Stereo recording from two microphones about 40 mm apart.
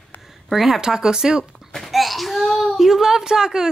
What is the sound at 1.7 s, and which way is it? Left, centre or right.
A child's voice, centre.